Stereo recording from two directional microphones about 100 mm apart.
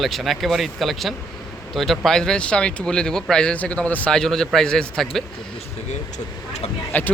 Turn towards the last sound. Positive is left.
turn(degrees=20)  # may be behind; listen again after turning